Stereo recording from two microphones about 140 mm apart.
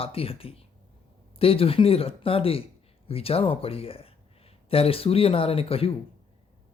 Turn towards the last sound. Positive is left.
turn(degrees=45)  # may be behind; listen again after turning